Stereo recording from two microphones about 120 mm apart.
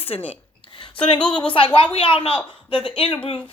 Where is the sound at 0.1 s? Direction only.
60° left (ahead or behind).